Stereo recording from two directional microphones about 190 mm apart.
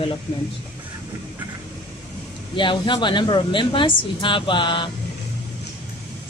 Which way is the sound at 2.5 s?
25° left (ahead or behind).